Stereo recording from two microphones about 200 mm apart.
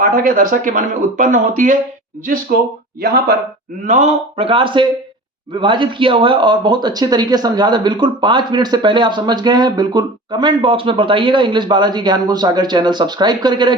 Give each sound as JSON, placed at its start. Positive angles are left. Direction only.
{"t": 0.0, "sound": "speech", "side_deg": -45}
{"t": 3.8, "sound": "speech", "side_deg": -35}